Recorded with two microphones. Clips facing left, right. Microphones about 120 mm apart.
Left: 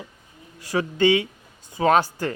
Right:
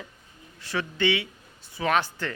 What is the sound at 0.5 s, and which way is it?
Speech, 40° left (ahead or behind).